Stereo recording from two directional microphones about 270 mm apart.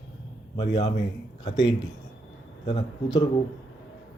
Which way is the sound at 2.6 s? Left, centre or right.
Centre.